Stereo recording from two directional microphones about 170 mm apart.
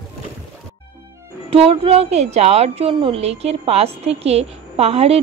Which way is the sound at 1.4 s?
35° right (ahead or behind).